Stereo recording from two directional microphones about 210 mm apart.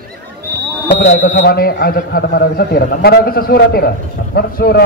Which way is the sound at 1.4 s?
45° left (ahead or behind).